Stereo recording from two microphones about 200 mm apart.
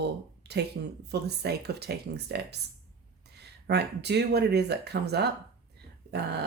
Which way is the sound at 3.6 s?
55° right (ahead or behind).